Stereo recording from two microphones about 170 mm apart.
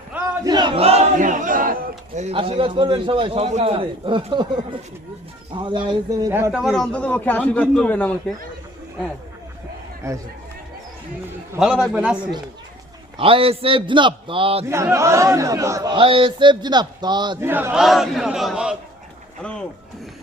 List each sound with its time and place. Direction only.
0.4 s battle cry: 25° right (ahead or behind)
0.8 s a sound: 35° right (ahead or behind)
2.3 s a man's voice: 30° right (ahead or behind)
6.5 s a man's voice: centre (ahead or behind)
10.0 s speech: 15° right (ahead or behind)
11.6 s speech: 5° right (ahead or behind)
13.1 s a man's voice: 30° right (ahead or behind)
14.7 s speech: 15° right (ahead or behind)
16.0 s a man's voice: 30° right (ahead or behind)
17.4 s speech: 10° right (ahead or behind); by 19.6 s 5° left (ahead or behind)